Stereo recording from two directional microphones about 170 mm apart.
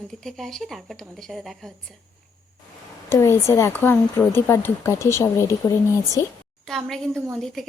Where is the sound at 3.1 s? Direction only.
15° left (ahead or behind).